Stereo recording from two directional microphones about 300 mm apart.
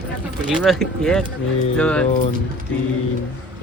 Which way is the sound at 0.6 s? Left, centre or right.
Centre.